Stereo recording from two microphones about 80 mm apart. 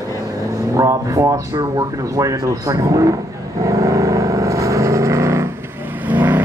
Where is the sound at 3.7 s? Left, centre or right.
Right.